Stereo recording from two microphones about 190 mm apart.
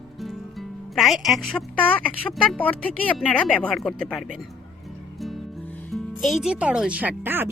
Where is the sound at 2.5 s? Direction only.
10° left (ahead or behind).